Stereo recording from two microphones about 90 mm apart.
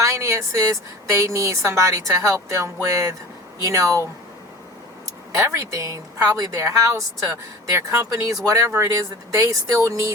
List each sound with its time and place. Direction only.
0.0 s a woman's voice: 35° right (ahead or behind)
5.4 s a woman's voice: 35° right (ahead or behind)